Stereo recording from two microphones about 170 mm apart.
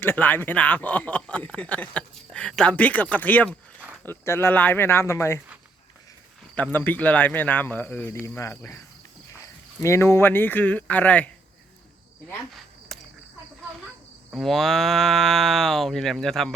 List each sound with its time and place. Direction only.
0.0 s speech: 10° left (ahead or behind)
6.6 s speech: 10° left (ahead or behind)
9.8 s speech: 15° left (ahead or behind)
12.9 s cricket: centre (ahead or behind)
14.3 s speech: centre (ahead or behind)